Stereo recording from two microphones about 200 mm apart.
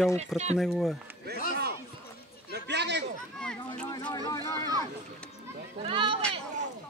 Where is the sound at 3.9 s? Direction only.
20° left (ahead or behind).